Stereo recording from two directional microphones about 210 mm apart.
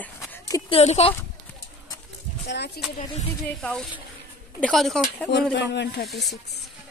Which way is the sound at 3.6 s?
5° left (ahead or behind).